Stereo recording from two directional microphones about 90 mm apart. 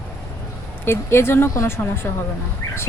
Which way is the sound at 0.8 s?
25° left (ahead or behind).